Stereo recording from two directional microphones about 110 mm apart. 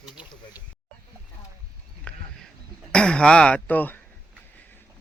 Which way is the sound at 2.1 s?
10° left (ahead or behind).